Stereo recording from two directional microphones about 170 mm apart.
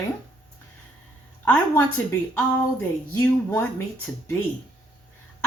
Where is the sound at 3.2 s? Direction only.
15° left (ahead or behind).